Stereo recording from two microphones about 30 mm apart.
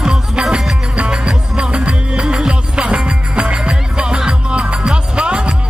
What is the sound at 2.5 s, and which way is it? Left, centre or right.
Music, right.